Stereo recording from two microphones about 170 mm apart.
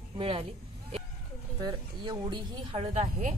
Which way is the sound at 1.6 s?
25° right (ahead or behind).